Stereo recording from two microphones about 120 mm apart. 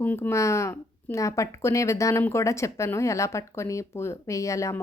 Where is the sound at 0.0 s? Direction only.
20° left (ahead or behind).